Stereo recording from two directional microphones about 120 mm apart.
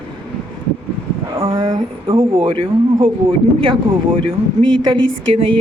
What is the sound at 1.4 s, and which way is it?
Speech, 50° right (ahead or behind).